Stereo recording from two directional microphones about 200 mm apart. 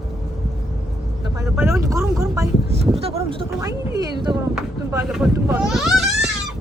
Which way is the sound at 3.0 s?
30° right (ahead or behind).